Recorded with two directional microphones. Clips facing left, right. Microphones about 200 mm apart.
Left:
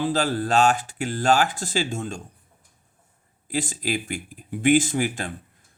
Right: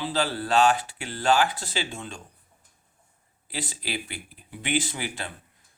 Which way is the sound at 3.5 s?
45° left (ahead or behind).